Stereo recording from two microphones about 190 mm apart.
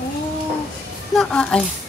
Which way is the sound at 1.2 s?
5° left (ahead or behind).